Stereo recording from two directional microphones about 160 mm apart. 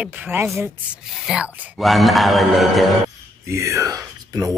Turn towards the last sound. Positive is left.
turn(degrees=-20)  # may be behind; listen again after turning